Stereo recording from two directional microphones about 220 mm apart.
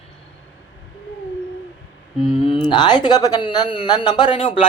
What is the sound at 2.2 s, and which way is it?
Speech, 25° left (ahead or behind).